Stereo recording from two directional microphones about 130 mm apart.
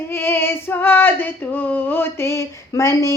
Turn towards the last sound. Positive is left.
turn(degrees=25)  # may be behind; listen again after turning